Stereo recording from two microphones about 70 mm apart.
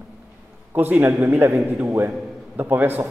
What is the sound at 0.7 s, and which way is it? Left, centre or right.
A man's voice, right.